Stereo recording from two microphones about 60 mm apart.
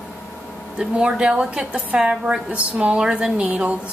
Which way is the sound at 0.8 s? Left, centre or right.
Centre.